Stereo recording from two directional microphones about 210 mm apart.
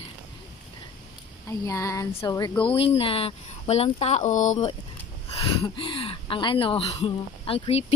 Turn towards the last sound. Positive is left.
turn(degrees=30)  # may be behind; listen again after turning